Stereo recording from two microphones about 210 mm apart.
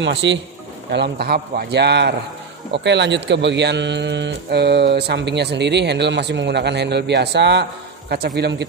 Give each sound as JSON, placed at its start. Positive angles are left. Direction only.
{"t": 0.0, "sound": "a man's voice", "side_deg": -60}